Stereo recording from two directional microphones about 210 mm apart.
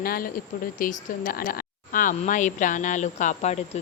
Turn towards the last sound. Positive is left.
turn(degrees=30)  # may be behind; listen again after turning